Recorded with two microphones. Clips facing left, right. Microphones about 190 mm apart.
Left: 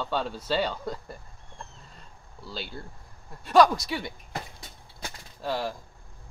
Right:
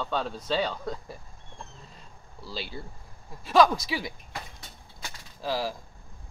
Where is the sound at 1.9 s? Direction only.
Centre (ahead or behind).